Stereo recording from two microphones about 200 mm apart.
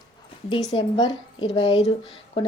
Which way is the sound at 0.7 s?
25° left (ahead or behind).